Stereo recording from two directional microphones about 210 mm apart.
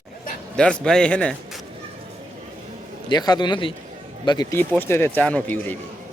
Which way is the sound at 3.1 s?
20° left (ahead or behind).